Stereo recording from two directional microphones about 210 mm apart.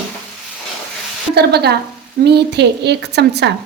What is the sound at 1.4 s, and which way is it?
A woman's voice, 50° right (ahead or behind).